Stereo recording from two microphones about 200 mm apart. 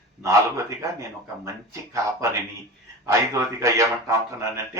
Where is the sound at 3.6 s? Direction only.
15° right (ahead or behind).